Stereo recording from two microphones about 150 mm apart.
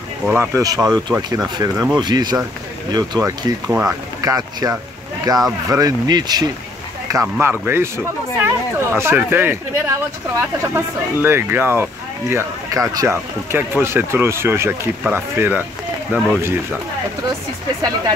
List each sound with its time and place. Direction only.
0.3 s speech: 20° right (ahead or behind)
0.7 s speech: centre (ahead or behind)
1.1 s speech: 20° right (ahead or behind)